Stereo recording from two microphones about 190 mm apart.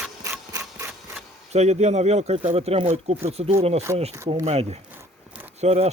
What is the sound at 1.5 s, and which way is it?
Speech, 35° right (ahead or behind).